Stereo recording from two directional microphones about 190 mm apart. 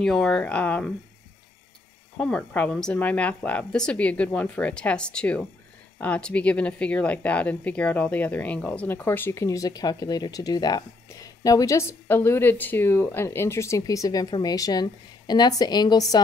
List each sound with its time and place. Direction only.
0.0 s speech: 5° left (ahead or behind)
2.1 s a woman's voice: 5° left (ahead or behind)